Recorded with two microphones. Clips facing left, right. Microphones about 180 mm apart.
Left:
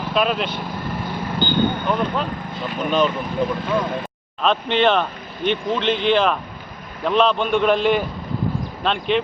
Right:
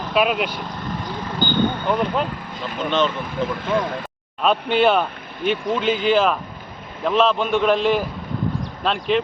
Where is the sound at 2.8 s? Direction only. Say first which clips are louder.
Left 1 dB; 10° left (ahead or behind).